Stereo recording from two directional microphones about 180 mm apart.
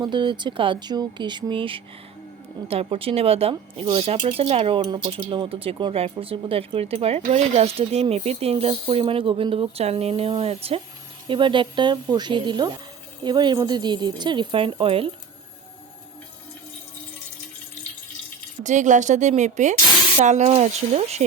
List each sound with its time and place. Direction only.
0.0 s speech: 25° right (ahead or behind)
18.6 s speech: 45° right (ahead or behind)